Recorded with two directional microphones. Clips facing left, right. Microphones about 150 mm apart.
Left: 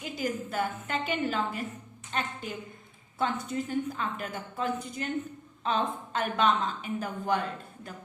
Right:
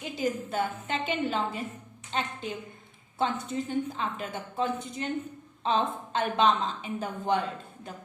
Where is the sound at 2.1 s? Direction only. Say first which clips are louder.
Right 1 dB; 25° right (ahead or behind).